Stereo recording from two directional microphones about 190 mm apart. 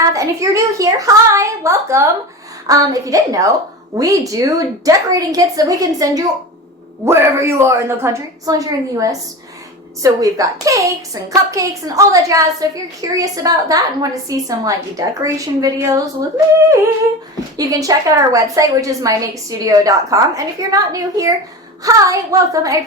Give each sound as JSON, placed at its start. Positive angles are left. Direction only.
{"t": 0.0, "sound": "a woman's voice", "side_deg": -15}
{"t": 17.6, "sound": "a woman's voice", "side_deg": -20}